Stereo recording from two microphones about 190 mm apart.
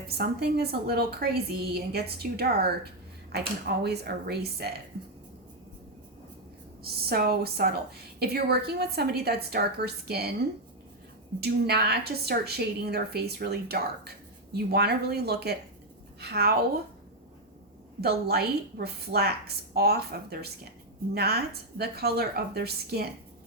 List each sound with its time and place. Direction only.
0.2 s a woman's voice: 55° right (ahead or behind)
6.8 s a woman's voice: 55° right (ahead or behind)
11.3 s a woman's voice: 55° right (ahead or behind)
18.0 s a woman's voice: 55° right (ahead or behind)